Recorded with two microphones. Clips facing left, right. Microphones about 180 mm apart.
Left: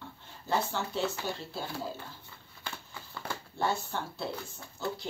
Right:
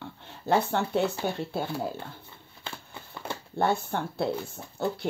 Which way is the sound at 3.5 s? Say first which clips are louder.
Right 6 dB; 55° right (ahead or behind).